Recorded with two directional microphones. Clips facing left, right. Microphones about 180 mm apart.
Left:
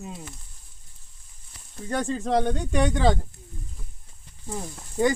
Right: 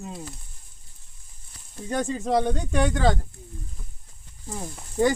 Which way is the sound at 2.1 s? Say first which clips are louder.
Even; 5° right (ahead or behind).